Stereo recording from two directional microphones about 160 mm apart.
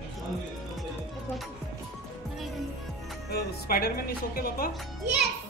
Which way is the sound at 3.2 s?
75° left (ahead or behind).